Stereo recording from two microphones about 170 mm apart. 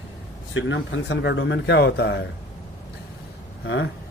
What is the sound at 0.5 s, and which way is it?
Speech, 90° left.